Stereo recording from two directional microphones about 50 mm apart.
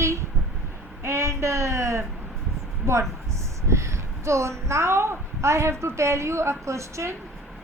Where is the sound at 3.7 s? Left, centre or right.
Right.